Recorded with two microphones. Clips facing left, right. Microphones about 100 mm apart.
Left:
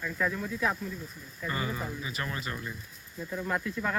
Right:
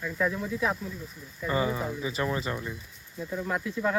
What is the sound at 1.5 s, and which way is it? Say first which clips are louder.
Speech: right 6 dB; 20° right (ahead or behind).